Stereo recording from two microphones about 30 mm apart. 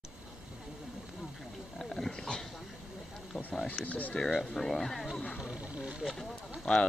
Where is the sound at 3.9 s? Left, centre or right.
Left.